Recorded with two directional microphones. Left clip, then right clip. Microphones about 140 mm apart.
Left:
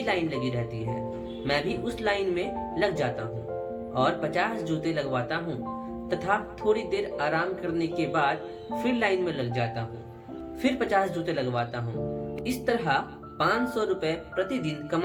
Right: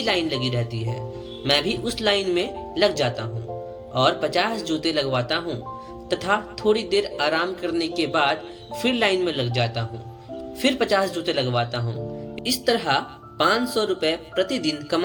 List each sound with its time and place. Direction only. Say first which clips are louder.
0.0 s speech: right 5 dB; 35° right (ahead or behind)